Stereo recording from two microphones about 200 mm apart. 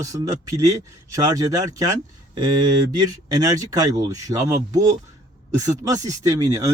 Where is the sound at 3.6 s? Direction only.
15° right (ahead or behind).